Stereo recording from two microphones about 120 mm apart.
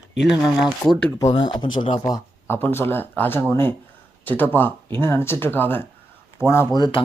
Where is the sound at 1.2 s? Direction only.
40° left (ahead or behind).